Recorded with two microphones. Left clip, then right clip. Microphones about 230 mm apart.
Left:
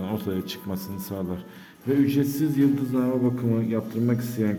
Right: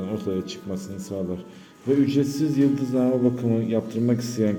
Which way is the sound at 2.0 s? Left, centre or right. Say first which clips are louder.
Right 1 dB; centre.